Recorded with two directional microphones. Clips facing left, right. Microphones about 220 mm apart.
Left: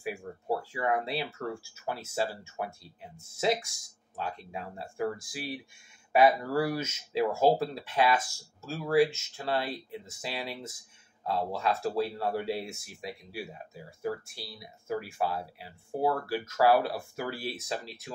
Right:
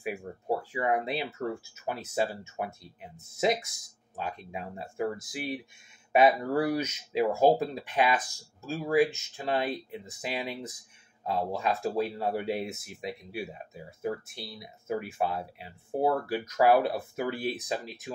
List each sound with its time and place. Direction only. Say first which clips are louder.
0.0 s speech: right 1 dB; 20° right (ahead or behind)